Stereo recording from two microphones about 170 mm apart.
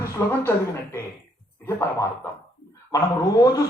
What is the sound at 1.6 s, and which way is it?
Speech, 15° left (ahead or behind).